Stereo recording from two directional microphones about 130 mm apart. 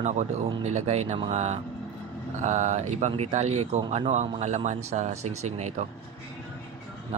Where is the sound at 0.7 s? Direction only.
60° right (ahead or behind).